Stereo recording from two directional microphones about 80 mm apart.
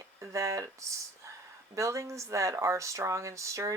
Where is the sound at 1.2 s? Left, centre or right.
Right.